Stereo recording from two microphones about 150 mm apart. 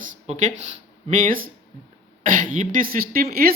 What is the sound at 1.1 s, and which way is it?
Speech, 65° right (ahead or behind).